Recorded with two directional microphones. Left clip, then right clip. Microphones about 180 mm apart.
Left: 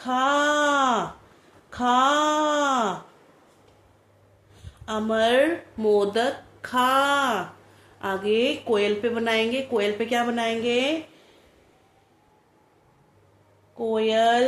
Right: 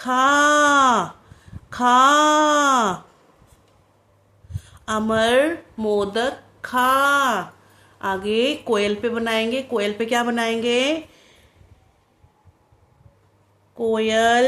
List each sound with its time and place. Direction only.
0.0 s a sound: 35° right (ahead or behind)
4.6 s speech: 40° right (ahead or behind)
13.7 s speech: 35° right (ahead or behind)